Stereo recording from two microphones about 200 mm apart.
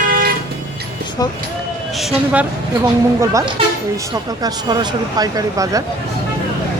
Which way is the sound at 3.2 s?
15° right (ahead or behind).